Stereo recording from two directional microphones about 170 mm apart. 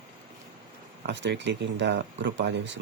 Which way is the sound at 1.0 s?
90° right.